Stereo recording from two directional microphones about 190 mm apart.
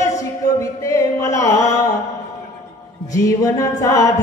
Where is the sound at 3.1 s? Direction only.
15° left (ahead or behind).